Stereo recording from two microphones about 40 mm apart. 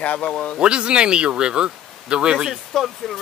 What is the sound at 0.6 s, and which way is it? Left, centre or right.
Speech, right.